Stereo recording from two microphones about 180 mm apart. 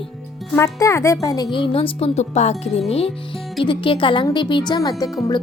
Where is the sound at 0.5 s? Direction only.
15° left (ahead or behind); by 2.8 s 40° left (ahead or behind).